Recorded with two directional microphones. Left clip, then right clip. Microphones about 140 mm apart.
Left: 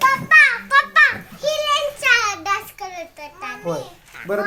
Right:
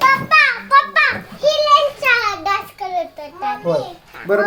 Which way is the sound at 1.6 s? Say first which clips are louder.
Right 3 dB; 15° right (ahead or behind).